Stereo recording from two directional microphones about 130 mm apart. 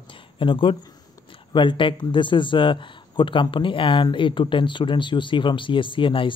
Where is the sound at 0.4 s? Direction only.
40° left (ahead or behind).